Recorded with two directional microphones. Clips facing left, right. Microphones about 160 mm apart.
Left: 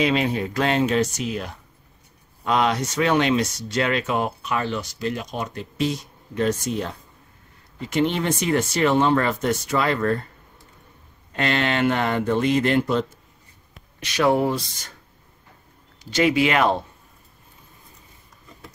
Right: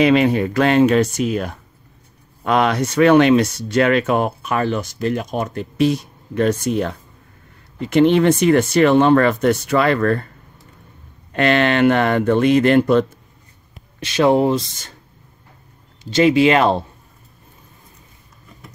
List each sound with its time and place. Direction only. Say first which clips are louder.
0.0 s speech: right 7 dB; 65° right (ahead or behind)
11.3 s speech: right 7 dB; 65° right (ahead or behind)
13.9 s speech: right 5 dB; 25° right (ahead or behind)
16.0 s speech: right 6 dB; 25° right (ahead or behind)